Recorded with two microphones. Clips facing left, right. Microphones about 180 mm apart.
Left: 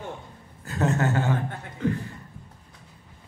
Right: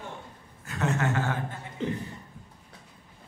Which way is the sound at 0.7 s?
35° left (ahead or behind).